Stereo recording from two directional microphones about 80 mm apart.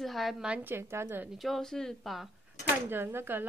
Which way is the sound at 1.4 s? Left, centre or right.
Centre.